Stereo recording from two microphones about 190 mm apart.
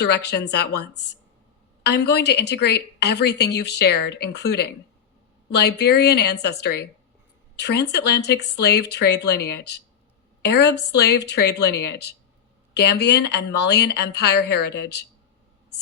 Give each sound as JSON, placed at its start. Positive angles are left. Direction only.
{"t": 0.0, "sound": "a woman's voice", "side_deg": 60}